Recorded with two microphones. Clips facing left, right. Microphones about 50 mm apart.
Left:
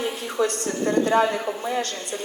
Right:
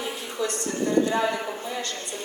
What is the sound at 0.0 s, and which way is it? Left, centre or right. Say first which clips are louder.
A woman's voice: left 5 dB; left.